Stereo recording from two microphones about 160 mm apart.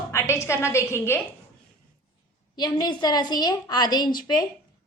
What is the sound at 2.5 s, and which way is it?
A woman's voice, 25° left (ahead or behind).